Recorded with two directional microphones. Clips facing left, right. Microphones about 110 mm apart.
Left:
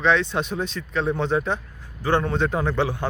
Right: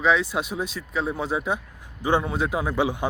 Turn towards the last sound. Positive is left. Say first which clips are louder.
# even
turn(degrees=-15)  # may be behind; listen again after turning